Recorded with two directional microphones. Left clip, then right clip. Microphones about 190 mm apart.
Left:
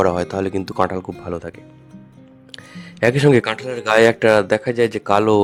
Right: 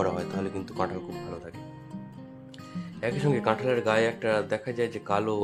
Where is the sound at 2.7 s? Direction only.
55° left (ahead or behind).